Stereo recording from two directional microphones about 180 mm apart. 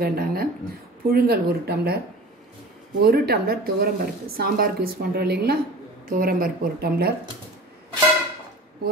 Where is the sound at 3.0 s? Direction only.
60° right (ahead or behind).